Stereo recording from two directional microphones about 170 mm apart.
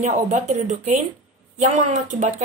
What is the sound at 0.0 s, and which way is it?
A woman's voice, 40° right (ahead or behind).